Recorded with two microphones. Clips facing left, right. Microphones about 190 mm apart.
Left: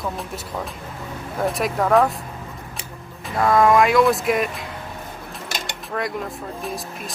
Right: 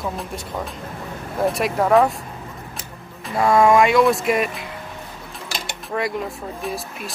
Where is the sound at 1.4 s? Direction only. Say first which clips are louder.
Right 2 dB; centre (ahead or behind).